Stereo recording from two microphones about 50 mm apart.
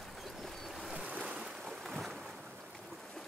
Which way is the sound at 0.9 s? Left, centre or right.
Right.